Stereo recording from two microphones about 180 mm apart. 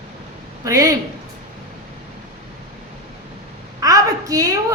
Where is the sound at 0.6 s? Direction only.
20° right (ahead or behind).